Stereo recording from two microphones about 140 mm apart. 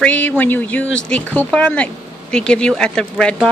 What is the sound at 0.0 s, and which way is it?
A woman's voice, 10° left (ahead or behind).